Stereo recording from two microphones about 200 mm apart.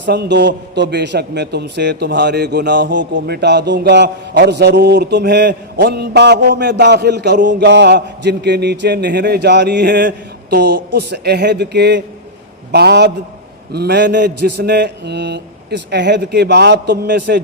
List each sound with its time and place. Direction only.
0.0 s a man's voice: 55° right (ahead or behind)